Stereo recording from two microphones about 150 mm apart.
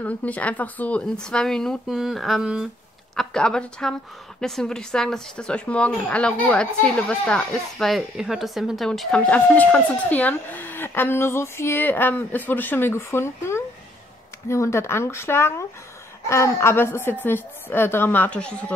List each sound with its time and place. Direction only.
0.0 s speech: 10° left (ahead or behind)